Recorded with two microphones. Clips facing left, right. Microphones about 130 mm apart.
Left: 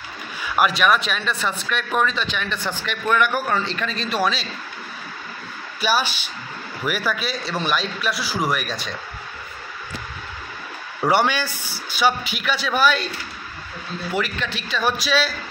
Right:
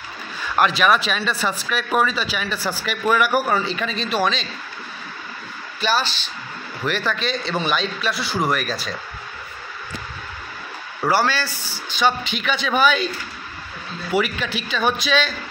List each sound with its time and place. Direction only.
0.6 s a man's voice: centre (ahead or behind)
5.8 s a man's voice: 10° left (ahead or behind)
11.1 s a man's voice: 20° left (ahead or behind); by 13.1 s centre (ahead or behind)
14.1 s a man's voice: 5° right (ahead or behind)